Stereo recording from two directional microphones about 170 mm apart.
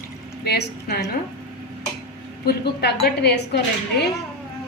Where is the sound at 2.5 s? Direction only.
75° left (ahead or behind).